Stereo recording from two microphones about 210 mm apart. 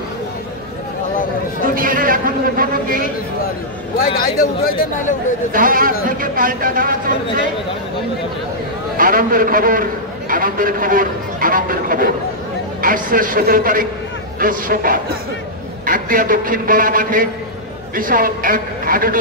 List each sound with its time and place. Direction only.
1.6 s a sound: 40° right (ahead or behind)
4.0 s speech: 45° left (ahead or behind)
5.5 s a man's voice: 40° right (ahead or behind)
8.9 s a man's voice: 40° right (ahead or behind)